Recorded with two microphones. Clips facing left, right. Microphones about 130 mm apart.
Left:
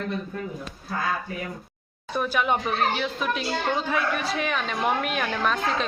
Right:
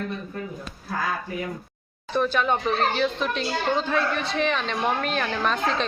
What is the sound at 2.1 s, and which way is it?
Speech, 10° left (ahead or behind).